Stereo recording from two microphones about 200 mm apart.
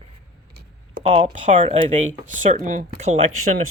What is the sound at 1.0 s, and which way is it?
Speech, 30° right (ahead or behind).